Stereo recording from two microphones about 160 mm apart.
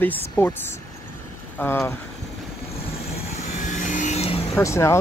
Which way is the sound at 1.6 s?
15° left (ahead or behind).